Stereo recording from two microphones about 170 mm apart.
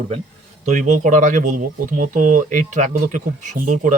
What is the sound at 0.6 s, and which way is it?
Speech, 45° right (ahead or behind).